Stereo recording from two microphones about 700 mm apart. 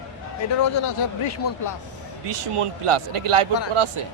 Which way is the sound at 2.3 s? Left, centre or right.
Right.